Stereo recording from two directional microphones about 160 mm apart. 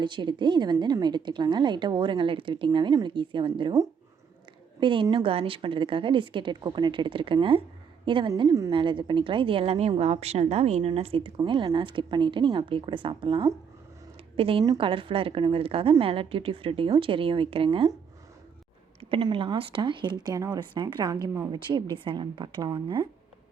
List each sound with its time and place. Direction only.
0.0 s a woman's voice: 30° right (ahead or behind)
18.9 s a woman's voice: 30° right (ahead or behind)